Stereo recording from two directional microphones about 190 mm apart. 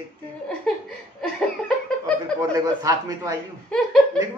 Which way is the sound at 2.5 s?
20° right (ahead or behind).